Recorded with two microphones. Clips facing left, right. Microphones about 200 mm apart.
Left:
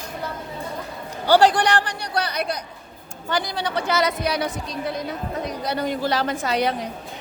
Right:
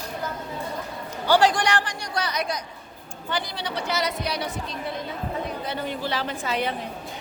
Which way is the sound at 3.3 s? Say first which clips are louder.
Left 5 dB; 45° left (ahead or behind).